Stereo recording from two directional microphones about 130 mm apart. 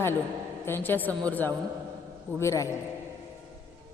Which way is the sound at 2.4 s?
25° left (ahead or behind).